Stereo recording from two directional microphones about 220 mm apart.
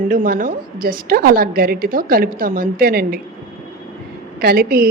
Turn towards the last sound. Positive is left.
turn(degrees=-45)  # may be behind; listen again after turning